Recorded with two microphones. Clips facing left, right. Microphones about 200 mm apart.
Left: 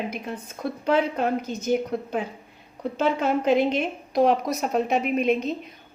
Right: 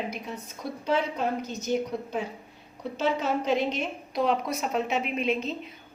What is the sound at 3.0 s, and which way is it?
Speech, 55° left (ahead or behind).